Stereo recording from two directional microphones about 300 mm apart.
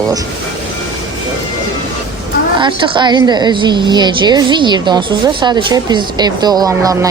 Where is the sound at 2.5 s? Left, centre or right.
Centre.